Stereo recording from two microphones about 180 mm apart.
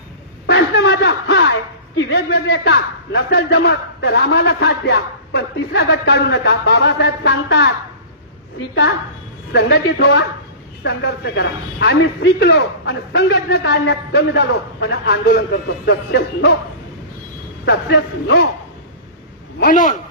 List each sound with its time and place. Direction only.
0.4 s a sound: 70° left (ahead or behind)
2.0 s a man's voice: 70° left (ahead or behind)
17.7 s a man's voice: 75° left (ahead or behind)
19.5 s a man's voice: 50° left (ahead or behind)